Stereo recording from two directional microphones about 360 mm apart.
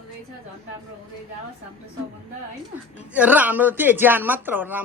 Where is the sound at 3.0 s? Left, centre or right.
Centre.